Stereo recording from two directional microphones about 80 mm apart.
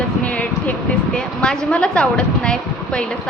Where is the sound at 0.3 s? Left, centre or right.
Centre.